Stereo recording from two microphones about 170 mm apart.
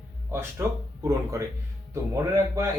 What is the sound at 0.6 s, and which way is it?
Speech, 15° right (ahead or behind).